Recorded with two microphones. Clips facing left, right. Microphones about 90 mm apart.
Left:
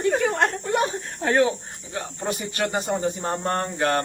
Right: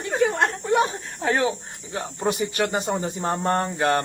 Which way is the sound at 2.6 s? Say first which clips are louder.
Left 2 dB; 25° right (ahead or behind).